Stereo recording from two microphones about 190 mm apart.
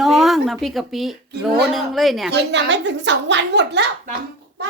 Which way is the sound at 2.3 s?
65° right (ahead or behind).